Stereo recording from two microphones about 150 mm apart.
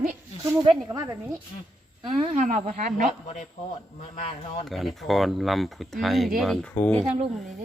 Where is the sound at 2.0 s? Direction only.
35° right (ahead or behind).